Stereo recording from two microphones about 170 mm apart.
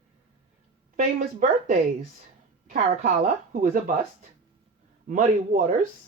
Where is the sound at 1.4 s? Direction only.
50° right (ahead or behind).